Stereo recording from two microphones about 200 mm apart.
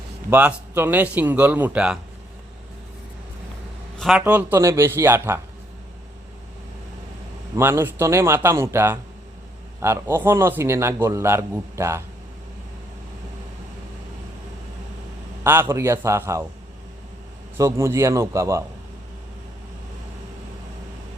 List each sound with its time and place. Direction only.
0.3 s a man's voice: 10° right (ahead or behind)
3.9 s a sound: centre (ahead or behind)
4.2 s a man's voice: 10° right (ahead or behind)
7.5 s a man's voice: 10° right (ahead or behind)
15.6 s a man's voice: 15° right (ahead or behind)
17.6 s a man's voice: 15° right (ahead or behind)